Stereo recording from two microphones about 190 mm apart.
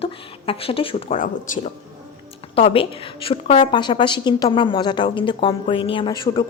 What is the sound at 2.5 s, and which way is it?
A woman's voice, 30° left (ahead or behind).